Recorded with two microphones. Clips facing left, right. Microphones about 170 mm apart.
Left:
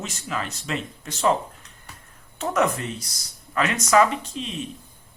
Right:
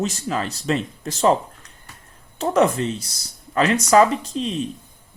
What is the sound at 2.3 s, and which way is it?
Speech, 30° right (ahead or behind).